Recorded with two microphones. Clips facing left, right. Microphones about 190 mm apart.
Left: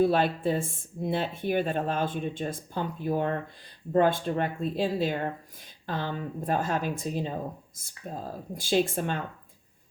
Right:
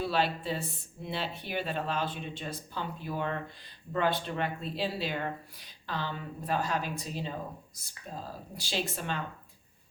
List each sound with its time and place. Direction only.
0.0 s speech: 50° left (ahead or behind)